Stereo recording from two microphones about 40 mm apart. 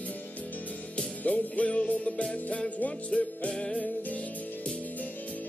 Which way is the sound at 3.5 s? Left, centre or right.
Centre.